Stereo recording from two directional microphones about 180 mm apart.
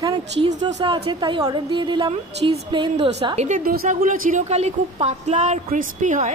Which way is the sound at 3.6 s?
55° right (ahead or behind).